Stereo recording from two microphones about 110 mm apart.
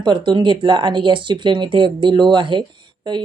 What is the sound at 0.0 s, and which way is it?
Speech, 45° right (ahead or behind).